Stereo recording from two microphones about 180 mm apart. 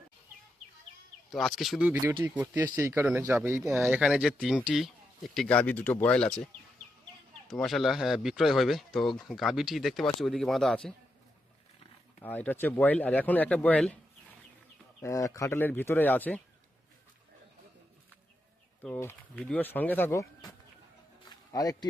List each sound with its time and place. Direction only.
1.3 s speech: centre (ahead or behind)
7.4 s speech: centre (ahead or behind)
12.2 s speech: 10° left (ahead or behind)
15.0 s speech: 15° left (ahead or behind)
18.8 s speech: 10° left (ahead or behind)
21.2 s music: 20° left (ahead or behind)